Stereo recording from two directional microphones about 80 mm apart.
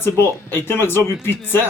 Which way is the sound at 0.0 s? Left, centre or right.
Left.